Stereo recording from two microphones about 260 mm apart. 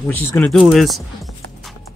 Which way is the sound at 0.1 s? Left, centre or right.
Centre.